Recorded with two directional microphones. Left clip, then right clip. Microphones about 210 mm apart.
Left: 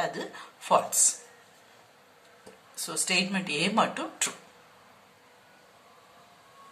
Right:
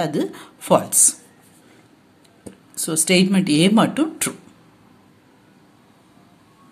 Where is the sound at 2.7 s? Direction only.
40° right (ahead or behind).